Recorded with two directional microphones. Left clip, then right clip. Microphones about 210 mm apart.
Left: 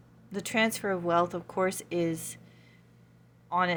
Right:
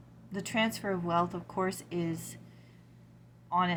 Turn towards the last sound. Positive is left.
turn(degrees=50)  # may be behind; listen again after turning